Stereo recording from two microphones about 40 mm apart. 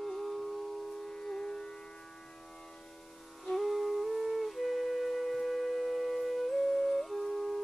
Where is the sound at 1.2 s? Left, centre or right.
Left.